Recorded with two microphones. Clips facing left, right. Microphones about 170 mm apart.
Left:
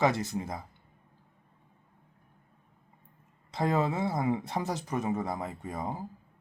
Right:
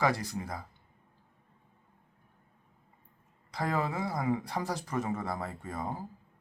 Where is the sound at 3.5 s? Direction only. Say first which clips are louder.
Left 4 dB; 25° left (ahead or behind).